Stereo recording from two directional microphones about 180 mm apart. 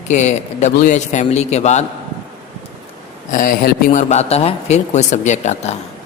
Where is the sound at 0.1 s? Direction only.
40° left (ahead or behind).